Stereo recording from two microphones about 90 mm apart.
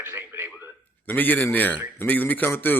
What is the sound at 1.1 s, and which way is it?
Speech, 20° left (ahead or behind).